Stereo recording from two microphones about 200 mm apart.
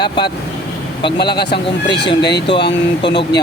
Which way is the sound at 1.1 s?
55° left (ahead or behind).